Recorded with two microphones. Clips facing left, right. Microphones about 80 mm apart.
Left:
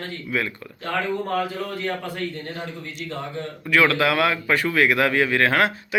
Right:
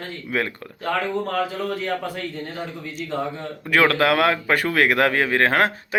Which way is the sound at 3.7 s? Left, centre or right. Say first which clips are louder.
Right 1 dB; right.